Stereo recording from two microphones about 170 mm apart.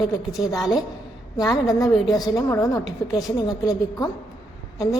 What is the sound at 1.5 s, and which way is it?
A woman's voice, 20° left (ahead or behind).